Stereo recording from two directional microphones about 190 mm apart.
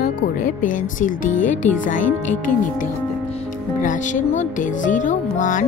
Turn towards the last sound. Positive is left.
turn(degrees=45)  # may be behind; listen again after turning